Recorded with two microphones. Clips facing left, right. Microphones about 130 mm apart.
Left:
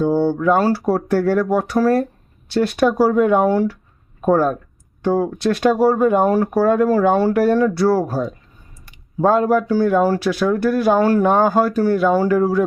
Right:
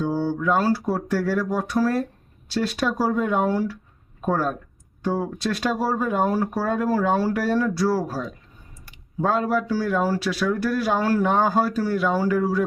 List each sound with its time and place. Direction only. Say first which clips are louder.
0.0 s speech: left 7 dB; 60° left (ahead or behind)
4.3 s speech: left 8 dB; 50° left (ahead or behind)
5.0 s speech: left 7 dB; 65° left (ahead or behind)